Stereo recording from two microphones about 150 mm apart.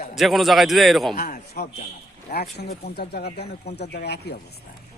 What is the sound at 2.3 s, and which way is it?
Speech, 90° left.